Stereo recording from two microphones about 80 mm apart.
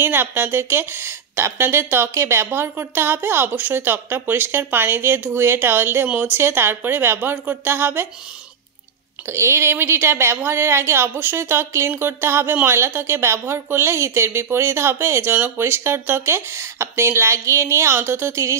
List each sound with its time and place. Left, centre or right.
0.0 s speech: right
9.3 s a woman's voice: right